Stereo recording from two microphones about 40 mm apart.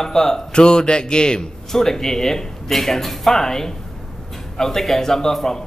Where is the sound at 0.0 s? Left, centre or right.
Centre.